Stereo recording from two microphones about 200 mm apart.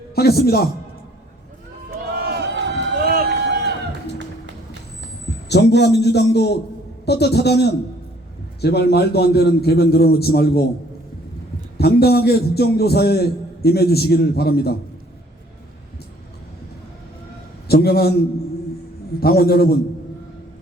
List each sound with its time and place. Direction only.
0.2 s a man's voice: 50° left (ahead or behind)
2.1 s run: 50° right (ahead or behind)
5.5 s a man's voice: 55° left (ahead or behind)
11.8 s a man's voice: 55° left (ahead or behind)
17.7 s a man's voice: 50° left (ahead or behind)
19.2 s a man's voice: 50° left (ahead or behind)